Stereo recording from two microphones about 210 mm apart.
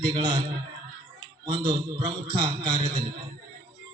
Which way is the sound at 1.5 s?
15° right (ahead or behind).